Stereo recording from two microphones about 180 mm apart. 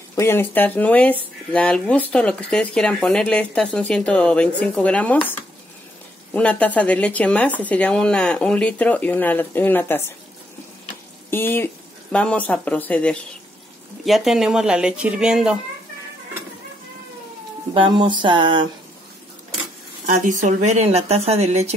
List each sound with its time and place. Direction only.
0.1 s speech: 15° left (ahead or behind)
6.3 s speech: 5° left (ahead or behind)
11.2 s speech: 10° left (ahead or behind); by 15.6 s 5° right (ahead or behind)
17.7 s a sound: 25° right (ahead or behind)
20.1 s speech: 45° right (ahead or behind)